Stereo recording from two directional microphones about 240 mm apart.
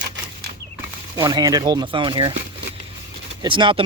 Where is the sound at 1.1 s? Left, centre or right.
Centre.